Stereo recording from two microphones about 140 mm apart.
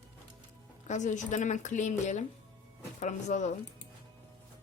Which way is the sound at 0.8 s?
60° left (ahead or behind).